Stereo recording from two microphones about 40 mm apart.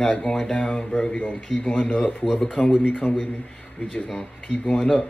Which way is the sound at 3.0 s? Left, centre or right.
Left.